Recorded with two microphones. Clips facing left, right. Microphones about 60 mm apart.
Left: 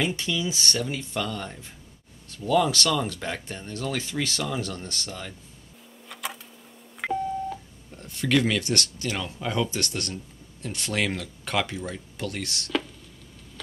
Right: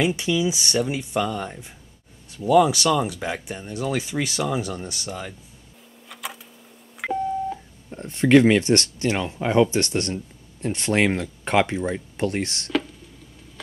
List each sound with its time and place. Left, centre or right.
0.0 s speech: centre
6.0 s a sound: centre
7.0 s beep: centre
7.9 s speech: right